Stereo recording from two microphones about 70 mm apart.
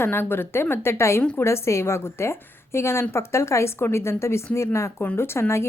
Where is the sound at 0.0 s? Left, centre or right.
Left.